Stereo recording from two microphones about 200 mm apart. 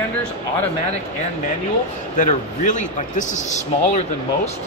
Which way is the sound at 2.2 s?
40° left (ahead or behind).